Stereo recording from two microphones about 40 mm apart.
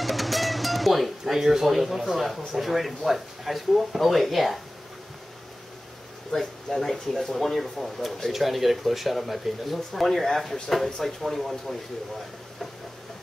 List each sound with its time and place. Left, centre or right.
0.0 s music: centre
1.7 s speech: centre
6.3 s speech: centre